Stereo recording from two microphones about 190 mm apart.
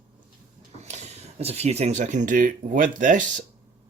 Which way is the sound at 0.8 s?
35° right (ahead or behind).